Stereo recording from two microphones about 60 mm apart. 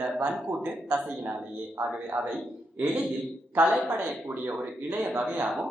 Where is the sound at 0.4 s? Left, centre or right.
Right.